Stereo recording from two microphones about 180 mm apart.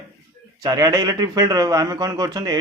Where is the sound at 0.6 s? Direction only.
20° right (ahead or behind).